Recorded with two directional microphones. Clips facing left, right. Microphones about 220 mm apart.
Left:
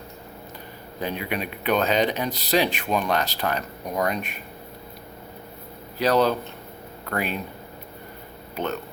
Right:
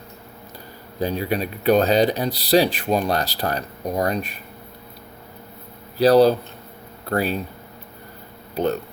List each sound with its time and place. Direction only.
0.9 s speech: 35° right (ahead or behind)
6.0 s speech: 35° right (ahead or behind)
8.5 s speech: 35° right (ahead or behind)